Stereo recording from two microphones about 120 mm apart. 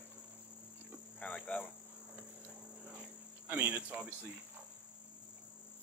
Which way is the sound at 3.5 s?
10° right (ahead or behind).